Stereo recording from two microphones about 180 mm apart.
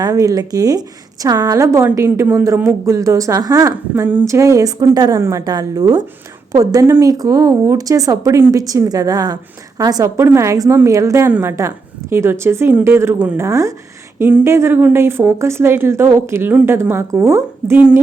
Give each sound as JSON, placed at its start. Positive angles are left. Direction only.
{"t": 0.0, "sound": "a woman's voice", "side_deg": -20}